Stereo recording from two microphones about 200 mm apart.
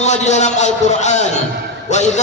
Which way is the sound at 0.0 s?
35° left (ahead or behind).